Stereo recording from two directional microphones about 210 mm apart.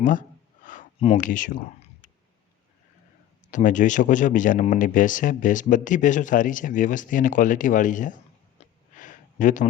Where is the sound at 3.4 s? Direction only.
40° left (ahead or behind).